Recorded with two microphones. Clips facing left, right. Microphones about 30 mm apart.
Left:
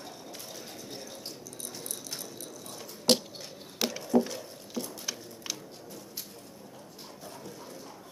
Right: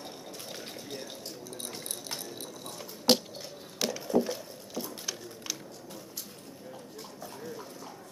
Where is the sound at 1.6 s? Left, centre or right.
Right.